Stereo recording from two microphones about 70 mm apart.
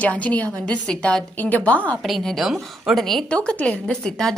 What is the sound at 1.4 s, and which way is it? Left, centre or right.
Speech, left.